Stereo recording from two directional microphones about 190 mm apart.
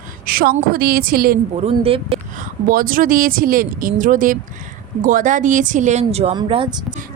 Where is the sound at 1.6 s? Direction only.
30° right (ahead or behind).